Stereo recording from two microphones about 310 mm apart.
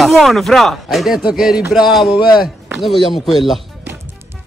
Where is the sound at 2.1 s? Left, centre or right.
Centre.